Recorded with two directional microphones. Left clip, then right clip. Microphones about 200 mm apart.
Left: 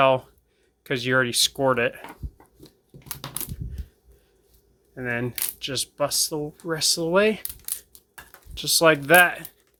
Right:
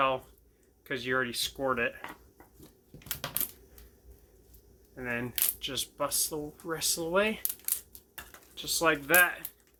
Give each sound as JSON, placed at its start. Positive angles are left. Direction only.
{"t": 0.9, "sound": "speech", "side_deg": 50}
{"t": 4.9, "sound": "speech", "side_deg": 40}
{"t": 8.5, "sound": "speech", "side_deg": 50}